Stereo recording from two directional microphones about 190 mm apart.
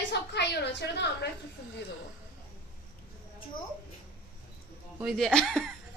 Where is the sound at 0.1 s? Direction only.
65° left (ahead or behind).